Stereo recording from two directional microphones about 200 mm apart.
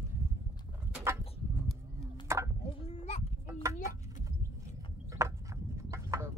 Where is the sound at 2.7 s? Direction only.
30° left (ahead or behind).